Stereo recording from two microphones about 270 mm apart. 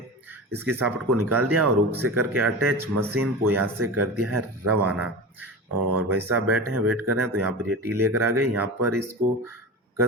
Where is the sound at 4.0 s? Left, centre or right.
Right.